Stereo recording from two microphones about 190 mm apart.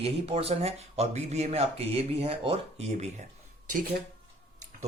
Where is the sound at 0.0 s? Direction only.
30° right (ahead or behind).